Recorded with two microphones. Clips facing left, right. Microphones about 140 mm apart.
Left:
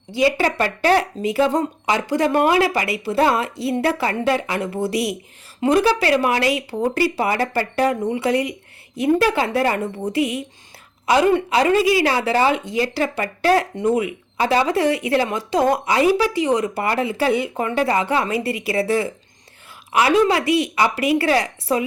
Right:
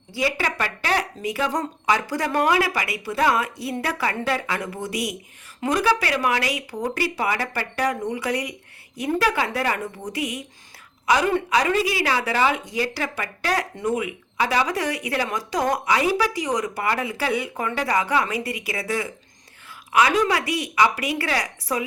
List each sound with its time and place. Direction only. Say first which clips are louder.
0.1 s speech: left 7 dB; 20° left (ahead or behind)